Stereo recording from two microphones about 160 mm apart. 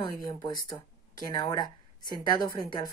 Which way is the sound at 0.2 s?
25° left (ahead or behind).